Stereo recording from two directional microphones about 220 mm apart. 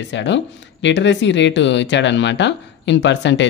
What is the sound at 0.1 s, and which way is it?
Speech, 55° left (ahead or behind).